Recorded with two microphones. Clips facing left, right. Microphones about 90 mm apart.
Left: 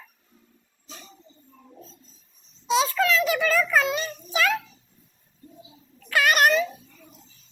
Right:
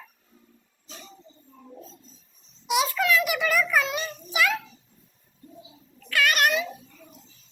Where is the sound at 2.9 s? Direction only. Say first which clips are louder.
Left 2 dB; 25° left (ahead or behind).